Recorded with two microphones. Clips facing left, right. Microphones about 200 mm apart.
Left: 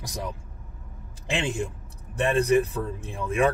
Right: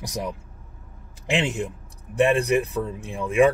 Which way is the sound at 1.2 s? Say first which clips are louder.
Right 3 dB; 20° right (ahead or behind).